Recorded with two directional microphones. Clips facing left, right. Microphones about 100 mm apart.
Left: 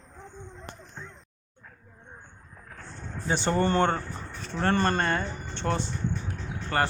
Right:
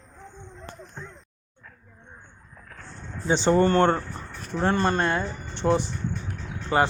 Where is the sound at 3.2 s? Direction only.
20° right (ahead or behind).